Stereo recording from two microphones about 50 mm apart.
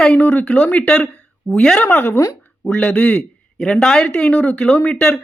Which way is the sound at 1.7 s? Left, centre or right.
Left.